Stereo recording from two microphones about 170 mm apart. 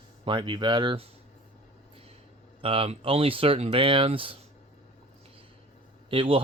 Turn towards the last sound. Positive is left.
turn(degrees=-30)  # may be behind; listen again after turning